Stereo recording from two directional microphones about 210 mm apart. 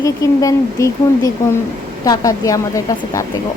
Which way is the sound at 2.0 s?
15° left (ahead or behind).